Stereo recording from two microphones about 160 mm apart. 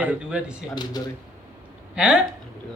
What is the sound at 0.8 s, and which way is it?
Speech, 25° left (ahead or behind).